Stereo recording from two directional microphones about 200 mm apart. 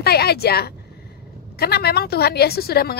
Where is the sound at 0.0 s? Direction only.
50° left (ahead or behind).